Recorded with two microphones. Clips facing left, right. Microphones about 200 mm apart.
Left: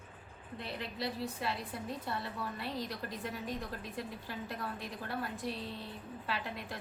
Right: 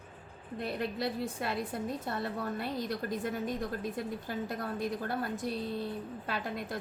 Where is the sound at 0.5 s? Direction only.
50° right (ahead or behind).